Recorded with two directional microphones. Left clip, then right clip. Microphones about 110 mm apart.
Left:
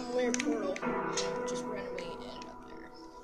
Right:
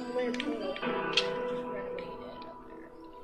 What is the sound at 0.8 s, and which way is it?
Speech, 30° right (ahead or behind).